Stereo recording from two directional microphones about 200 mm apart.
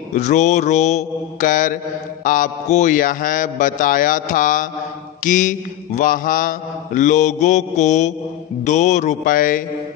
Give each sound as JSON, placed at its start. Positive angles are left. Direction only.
{"t": 0.1, "sound": "mantra", "side_deg": 35}